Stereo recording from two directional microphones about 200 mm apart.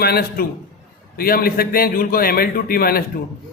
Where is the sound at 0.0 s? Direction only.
50° left (ahead or behind).